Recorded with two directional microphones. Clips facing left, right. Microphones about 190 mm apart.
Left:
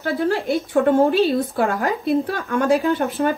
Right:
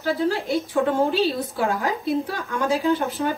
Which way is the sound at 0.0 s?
55° left (ahead or behind).